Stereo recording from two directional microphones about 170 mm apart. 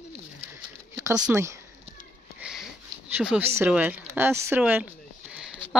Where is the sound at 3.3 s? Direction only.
5° right (ahead or behind).